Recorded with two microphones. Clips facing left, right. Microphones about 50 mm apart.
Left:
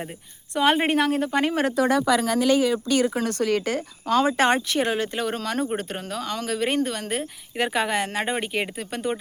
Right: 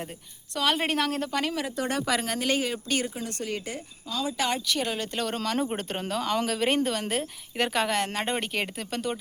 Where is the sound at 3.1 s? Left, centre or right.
Left.